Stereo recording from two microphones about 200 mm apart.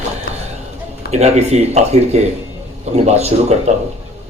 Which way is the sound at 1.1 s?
35° right (ahead or behind).